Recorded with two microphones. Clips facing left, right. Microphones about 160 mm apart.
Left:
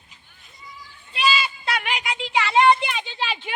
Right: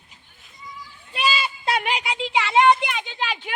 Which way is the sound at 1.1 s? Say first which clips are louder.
Left 1 dB; 45° right (ahead or behind).